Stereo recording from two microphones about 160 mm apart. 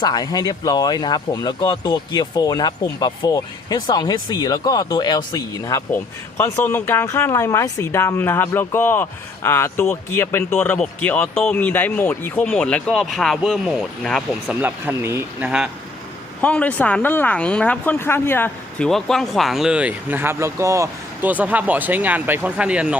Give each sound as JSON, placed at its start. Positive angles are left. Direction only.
{"t": 0.0, "sound": "speech", "side_deg": 25}
{"t": 14.6, "sound": "speech", "side_deg": -15}
{"t": 15.4, "sound": "speech", "side_deg": -5}
{"t": 16.4, "sound": "speech", "side_deg": 10}
{"t": 18.9, "sound": "speech", "side_deg": 0}